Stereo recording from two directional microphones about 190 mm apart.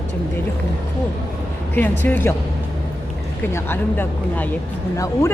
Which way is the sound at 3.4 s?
10° left (ahead or behind).